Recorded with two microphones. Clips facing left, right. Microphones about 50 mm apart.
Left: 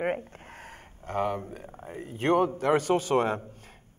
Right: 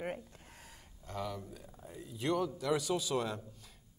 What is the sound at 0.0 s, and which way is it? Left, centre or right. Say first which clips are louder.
Speech: left 11 dB; left.